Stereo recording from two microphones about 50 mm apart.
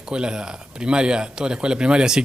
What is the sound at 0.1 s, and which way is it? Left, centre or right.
A man's voice, centre.